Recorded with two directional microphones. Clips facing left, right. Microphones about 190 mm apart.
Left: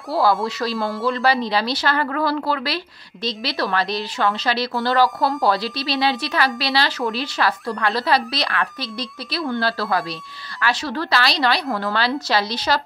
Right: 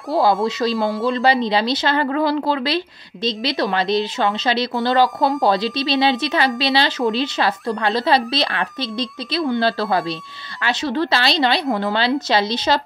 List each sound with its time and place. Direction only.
0.1 s speech: 15° right (ahead or behind)